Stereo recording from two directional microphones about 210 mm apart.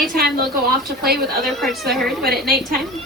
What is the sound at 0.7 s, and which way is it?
Speech, 50° right (ahead or behind).